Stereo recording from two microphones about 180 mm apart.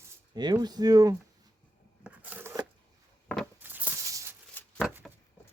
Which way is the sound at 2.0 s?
10° right (ahead or behind).